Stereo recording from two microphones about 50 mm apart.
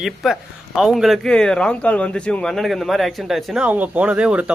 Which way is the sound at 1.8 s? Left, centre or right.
Left.